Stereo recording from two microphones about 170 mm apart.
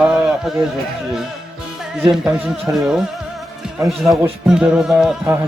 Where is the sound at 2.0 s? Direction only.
5° right (ahead or behind).